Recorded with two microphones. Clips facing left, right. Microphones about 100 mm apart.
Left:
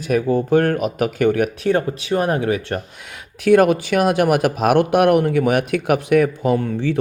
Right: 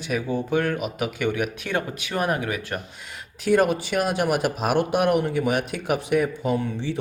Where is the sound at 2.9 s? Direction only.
60° left (ahead or behind).